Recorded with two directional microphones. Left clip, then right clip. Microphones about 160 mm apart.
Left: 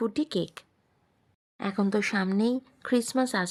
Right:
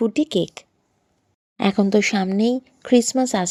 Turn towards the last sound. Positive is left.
turn(degrees=-20)  # may be behind; listen again after turning